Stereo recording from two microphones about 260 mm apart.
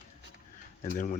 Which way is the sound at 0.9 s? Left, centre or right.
Left.